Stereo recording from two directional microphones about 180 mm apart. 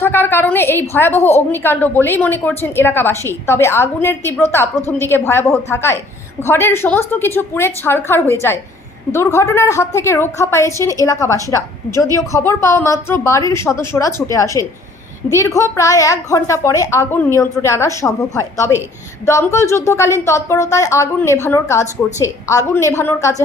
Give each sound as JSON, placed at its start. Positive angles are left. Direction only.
{"t": 0.0, "sound": "a woman's voice", "side_deg": 10}